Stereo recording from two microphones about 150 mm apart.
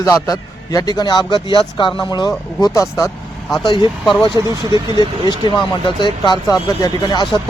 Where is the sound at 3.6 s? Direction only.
30° left (ahead or behind).